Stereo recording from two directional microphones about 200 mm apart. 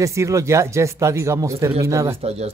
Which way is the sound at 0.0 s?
15° right (ahead or behind).